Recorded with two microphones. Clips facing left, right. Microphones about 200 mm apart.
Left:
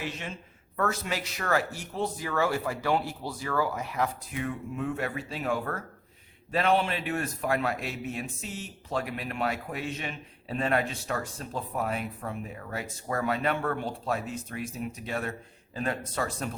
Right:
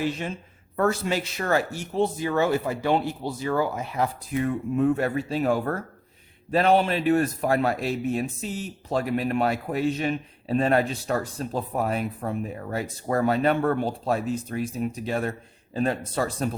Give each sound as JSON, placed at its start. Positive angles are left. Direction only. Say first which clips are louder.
{"t": 0.8, "sound": "speech", "louder": "right 6 dB", "side_deg": -30}